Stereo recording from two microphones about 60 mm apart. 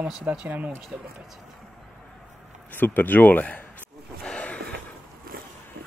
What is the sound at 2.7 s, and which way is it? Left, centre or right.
Speech, left.